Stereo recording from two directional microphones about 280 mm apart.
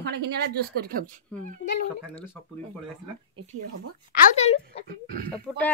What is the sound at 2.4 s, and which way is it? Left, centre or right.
Speech, centre.